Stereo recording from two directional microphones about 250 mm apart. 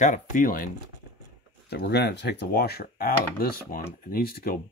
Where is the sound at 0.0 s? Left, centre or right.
Left.